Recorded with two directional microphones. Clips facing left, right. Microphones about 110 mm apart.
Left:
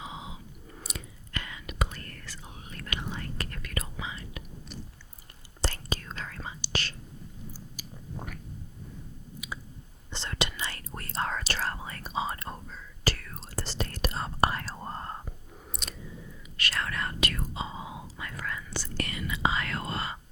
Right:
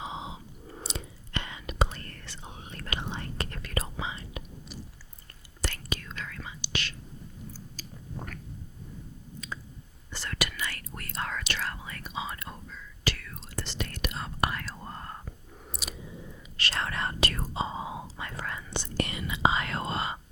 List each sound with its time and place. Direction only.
0.0 s whispering: 25° right (ahead or behind)
5.6 s whispering: 35° left (ahead or behind)
7.8 s chewing: 10° left (ahead or behind)
9.4 s a sound: 10° left (ahead or behind)
10.1 s whispering: 25° left (ahead or behind)
15.5 s chewing: centre (ahead or behind)
16.6 s whispering: 30° right (ahead or behind)